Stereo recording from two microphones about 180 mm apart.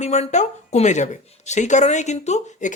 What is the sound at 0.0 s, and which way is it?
Speech, 40° left (ahead or behind).